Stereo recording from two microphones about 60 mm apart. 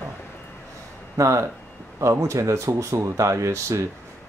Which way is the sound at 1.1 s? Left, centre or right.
Right.